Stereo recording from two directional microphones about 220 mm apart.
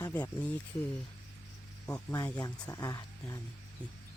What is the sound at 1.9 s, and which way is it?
Speech, 10° left (ahead or behind).